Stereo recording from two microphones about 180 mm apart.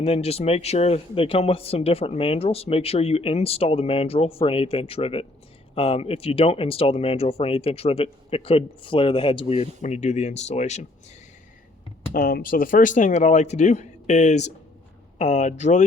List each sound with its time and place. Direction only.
0.0 s speech: 35° left (ahead or behind)
12.1 s speech: 55° left (ahead or behind)